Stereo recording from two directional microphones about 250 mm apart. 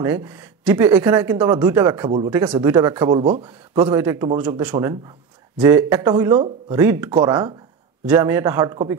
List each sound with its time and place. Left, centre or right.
0.0 s speech: centre
3.4 s speech: centre